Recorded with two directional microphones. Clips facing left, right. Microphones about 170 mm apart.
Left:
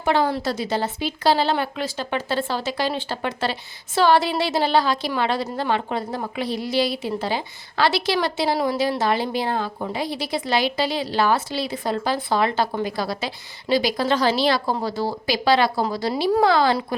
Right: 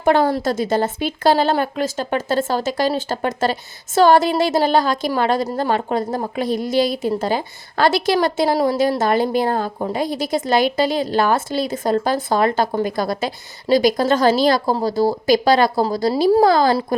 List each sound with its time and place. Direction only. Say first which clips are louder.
0.0 s a woman's voice: right 5 dB; 50° right (ahead or behind)